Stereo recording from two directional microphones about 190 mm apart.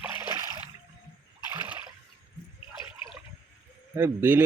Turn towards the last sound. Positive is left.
turn(degrees=-10)  # may be behind; listen again after turning